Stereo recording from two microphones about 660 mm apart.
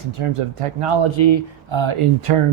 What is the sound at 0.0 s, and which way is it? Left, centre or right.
Speech, right.